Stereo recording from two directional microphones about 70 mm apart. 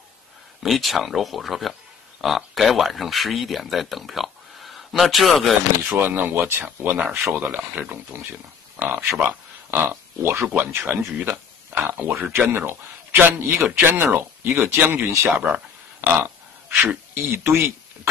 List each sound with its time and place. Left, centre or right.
0.6 s speech: centre
5.9 s speech: right
9.7 s pig: right
10.4 s speech: right
15.2 s speech: right